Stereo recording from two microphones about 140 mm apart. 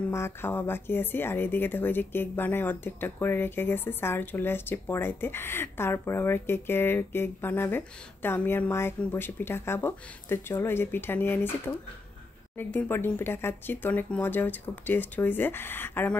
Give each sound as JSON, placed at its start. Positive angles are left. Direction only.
{"t": 0.1, "sound": "speech", "side_deg": 15}